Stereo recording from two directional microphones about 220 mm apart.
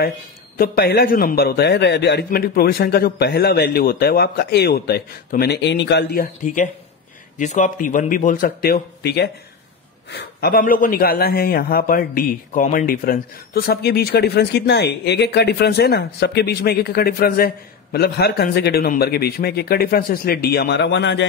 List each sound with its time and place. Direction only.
0.6 s a man's voice: 45° left (ahead or behind)